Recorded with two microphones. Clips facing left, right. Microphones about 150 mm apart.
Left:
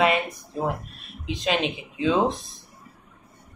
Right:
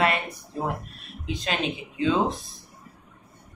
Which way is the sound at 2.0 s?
15° left (ahead or behind).